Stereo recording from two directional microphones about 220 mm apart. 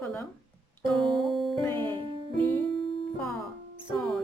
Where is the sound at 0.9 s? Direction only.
Centre (ahead or behind).